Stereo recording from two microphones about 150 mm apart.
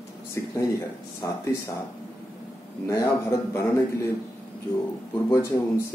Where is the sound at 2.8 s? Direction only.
20° left (ahead or behind).